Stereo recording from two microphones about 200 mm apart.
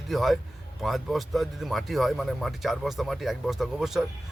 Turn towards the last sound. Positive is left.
turn(degrees=0)  # may be behind; listen again after turning